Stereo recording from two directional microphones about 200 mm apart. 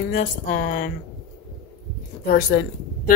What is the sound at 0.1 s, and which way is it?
Speech, 45° left (ahead or behind).